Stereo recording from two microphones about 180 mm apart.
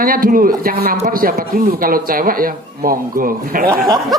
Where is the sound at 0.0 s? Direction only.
50° right (ahead or behind).